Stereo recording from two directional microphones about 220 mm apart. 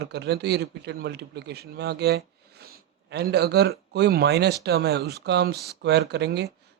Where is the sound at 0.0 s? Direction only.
50° right (ahead or behind).